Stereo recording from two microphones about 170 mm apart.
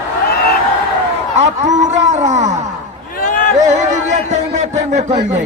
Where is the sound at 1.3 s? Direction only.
40° right (ahead or behind).